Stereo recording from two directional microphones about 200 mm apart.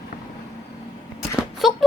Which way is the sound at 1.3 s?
Centre (ahead or behind).